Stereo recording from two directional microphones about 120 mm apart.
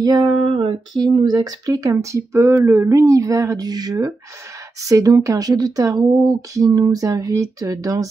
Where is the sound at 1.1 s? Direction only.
35° right (ahead or behind).